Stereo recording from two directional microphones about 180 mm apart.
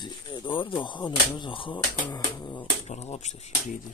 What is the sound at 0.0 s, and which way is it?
Speech, 25° left (ahead or behind).